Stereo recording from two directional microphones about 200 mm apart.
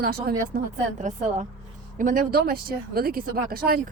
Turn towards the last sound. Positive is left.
turn(degrees=-50)  # may be behind; listen again after turning